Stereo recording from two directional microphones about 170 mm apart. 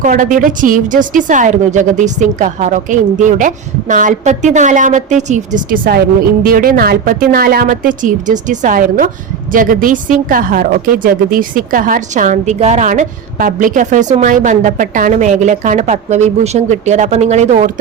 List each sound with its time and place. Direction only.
0.0 s a woman's voice: 50° right (ahead or behind)